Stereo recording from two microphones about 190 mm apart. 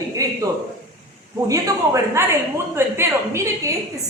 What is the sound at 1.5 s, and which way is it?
A woman's voice, 15° right (ahead or behind).